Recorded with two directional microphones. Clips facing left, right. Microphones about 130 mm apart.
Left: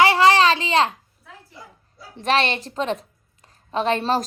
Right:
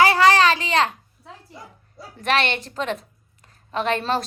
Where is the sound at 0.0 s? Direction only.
30° left (ahead or behind).